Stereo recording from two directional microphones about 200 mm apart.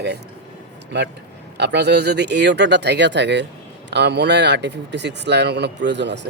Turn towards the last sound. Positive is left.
turn(degrees=-60)  # may be behind; listen again after turning